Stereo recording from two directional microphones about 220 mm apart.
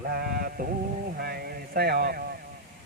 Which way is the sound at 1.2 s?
45° right (ahead or behind).